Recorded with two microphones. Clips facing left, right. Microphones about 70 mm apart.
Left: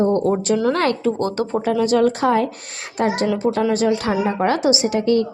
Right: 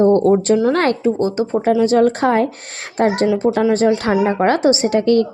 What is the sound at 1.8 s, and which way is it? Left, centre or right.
A woman's voice, right.